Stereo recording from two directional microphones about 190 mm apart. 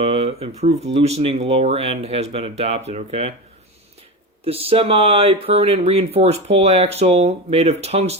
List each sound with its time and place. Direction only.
0.0 s speech: 30° right (ahead or behind)
4.4 s speech: 30° right (ahead or behind)